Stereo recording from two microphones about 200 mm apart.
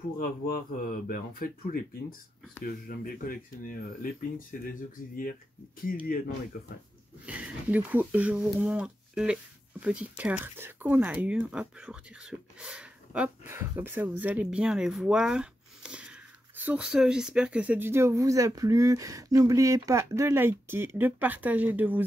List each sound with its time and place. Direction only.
0.2 s speech: 45° left (ahead or behind)
7.2 s speech: 5° right (ahead or behind)